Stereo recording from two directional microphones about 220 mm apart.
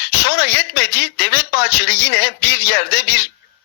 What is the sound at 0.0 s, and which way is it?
A man's voice, 50° left (ahead or behind).